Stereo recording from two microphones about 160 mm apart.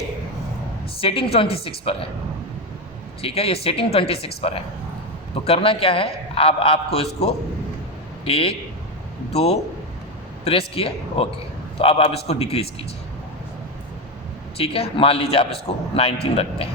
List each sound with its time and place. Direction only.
0.9 s a man's voice: 35° left (ahead or behind)
3.2 s a man's voice: 35° left (ahead or behind)
14.6 s a man's voice: 35° left (ahead or behind)